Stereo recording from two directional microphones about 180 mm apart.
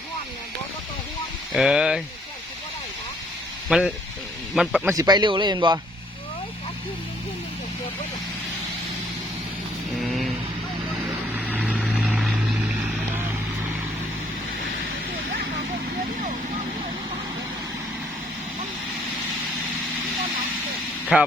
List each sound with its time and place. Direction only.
1.5 s speech: 5° right (ahead or behind)
3.7 s a man's voice: 5° right (ahead or behind)
4.9 s a man's voice: 25° right (ahead or behind)
11.3 s vehicle: 10° right (ahead or behind)
21.1 s speech: 5° right (ahead or behind)